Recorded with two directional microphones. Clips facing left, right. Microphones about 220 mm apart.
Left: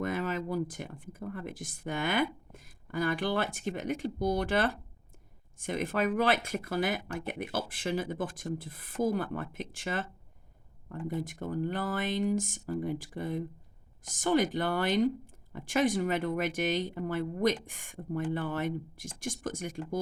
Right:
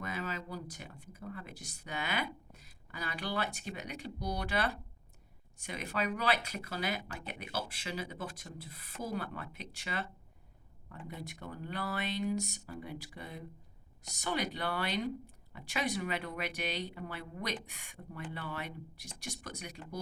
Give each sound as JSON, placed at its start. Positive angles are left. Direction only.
{"t": 0.0, "sound": "speech", "side_deg": 50}